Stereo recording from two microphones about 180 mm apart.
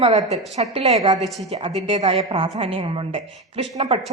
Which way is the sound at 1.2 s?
Centre (ahead or behind).